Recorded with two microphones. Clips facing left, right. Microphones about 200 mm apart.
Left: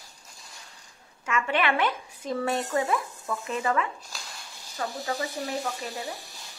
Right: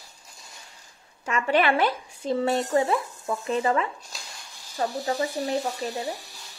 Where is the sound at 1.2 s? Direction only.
35° right (ahead or behind).